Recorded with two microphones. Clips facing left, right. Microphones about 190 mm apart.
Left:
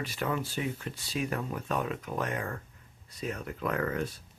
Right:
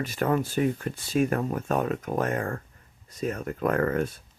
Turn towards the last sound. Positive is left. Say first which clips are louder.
# right 6 dB
turn(degrees=-55)  # may be behind; listen again after turning